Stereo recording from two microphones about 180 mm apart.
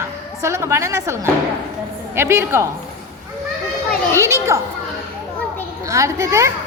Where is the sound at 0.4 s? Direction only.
15° right (ahead or behind).